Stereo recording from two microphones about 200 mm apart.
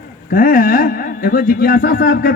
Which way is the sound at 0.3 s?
45° left (ahead or behind).